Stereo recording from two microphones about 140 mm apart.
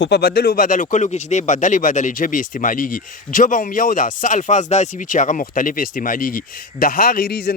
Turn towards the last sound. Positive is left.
turn(degrees=90)